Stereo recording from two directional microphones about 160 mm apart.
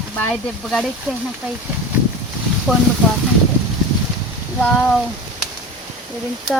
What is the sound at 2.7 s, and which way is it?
Speech, 5° right (ahead or behind).